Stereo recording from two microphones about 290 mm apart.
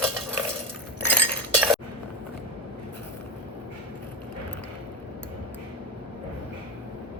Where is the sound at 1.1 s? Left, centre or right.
Centre.